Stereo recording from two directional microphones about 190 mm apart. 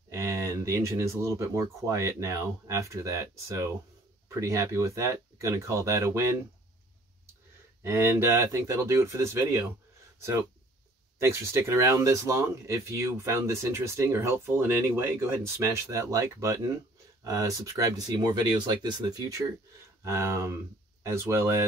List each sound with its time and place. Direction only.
0.1 s speech: 15° right (ahead or behind)
7.8 s speech: 10° right (ahead or behind)
11.1 s speech: 15° right (ahead or behind)